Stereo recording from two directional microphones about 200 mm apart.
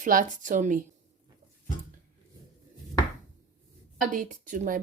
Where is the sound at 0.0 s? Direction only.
40° right (ahead or behind).